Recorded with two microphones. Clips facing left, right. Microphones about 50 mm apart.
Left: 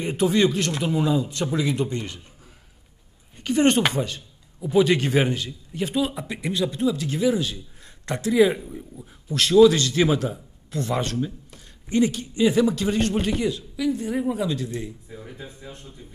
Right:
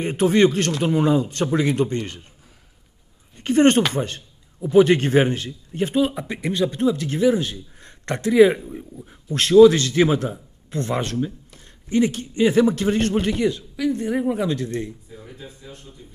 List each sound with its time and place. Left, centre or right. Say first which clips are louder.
0.0 s speech: right 3 dB; right
3.4 s speech: right 4 dB; right
3.9 s a sound: right 1 dB; right
4.7 s speech: right 4 dB; right; by 11.3 s centre
11.9 s speech: right 1 dB; right
15.1 s speech: left 1 dB; centre